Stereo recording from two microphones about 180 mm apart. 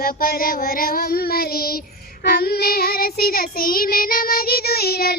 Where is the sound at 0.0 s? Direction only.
55° left (ahead or behind).